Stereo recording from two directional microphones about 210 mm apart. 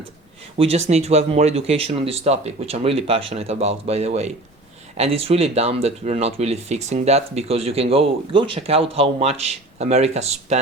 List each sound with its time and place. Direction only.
0.6 s speech: 30° right (ahead or behind)